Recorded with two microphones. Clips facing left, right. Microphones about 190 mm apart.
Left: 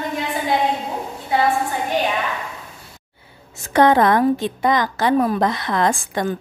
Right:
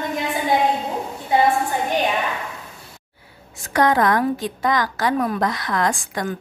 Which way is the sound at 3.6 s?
25° left (ahead or behind).